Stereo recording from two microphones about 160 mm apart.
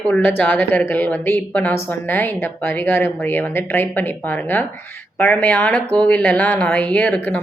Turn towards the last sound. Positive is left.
turn(degrees=10)  # may be behind; listen again after turning